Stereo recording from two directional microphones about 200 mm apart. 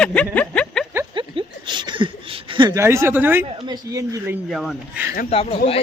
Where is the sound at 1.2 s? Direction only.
25° right (ahead or behind).